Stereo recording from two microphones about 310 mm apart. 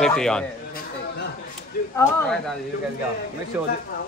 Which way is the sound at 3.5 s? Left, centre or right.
Centre.